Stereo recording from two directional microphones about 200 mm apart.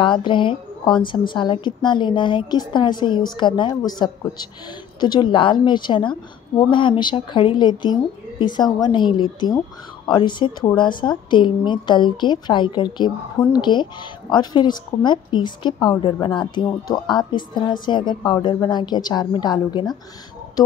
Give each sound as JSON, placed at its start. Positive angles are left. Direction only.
{"t": 0.0, "sound": "a woman's voice", "side_deg": 25}